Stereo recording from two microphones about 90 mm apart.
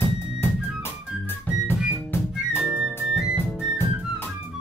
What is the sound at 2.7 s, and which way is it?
Music, 10° right (ahead or behind).